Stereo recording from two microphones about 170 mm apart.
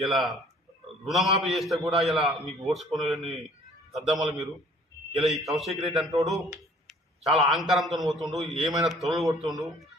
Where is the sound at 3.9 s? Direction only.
Centre (ahead or behind).